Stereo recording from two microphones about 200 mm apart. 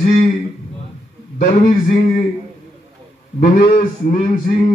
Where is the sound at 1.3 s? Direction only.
40° left (ahead or behind).